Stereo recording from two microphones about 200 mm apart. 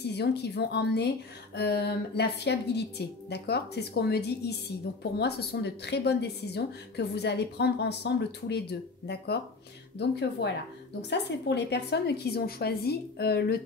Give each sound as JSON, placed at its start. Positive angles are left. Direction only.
{"t": 0.0, "sound": "a woman's voice", "side_deg": 55}